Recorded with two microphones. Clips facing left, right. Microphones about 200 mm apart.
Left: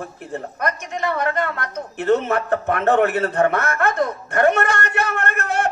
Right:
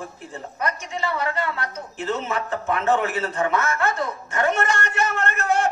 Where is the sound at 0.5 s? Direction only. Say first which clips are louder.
Left 1 dB; 60° left (ahead or behind).